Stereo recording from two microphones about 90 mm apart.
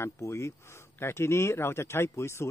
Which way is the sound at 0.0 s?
35° left (ahead or behind).